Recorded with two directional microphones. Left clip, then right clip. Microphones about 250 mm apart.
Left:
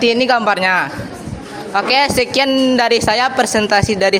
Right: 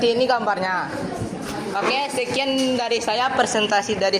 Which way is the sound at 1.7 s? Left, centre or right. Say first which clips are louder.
Left 9 dB; left.